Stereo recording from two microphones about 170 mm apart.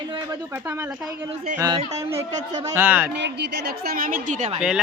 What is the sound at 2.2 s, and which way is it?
Speech, 40° right (ahead or behind).